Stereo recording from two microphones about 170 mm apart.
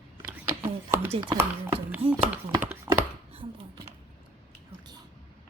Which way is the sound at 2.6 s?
10° right (ahead or behind).